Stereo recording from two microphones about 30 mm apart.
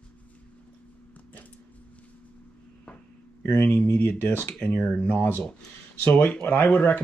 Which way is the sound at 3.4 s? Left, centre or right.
Left.